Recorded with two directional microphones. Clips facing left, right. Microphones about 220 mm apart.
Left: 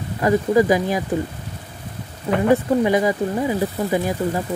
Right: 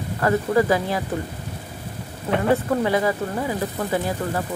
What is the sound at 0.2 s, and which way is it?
Speech, 15° left (ahead or behind).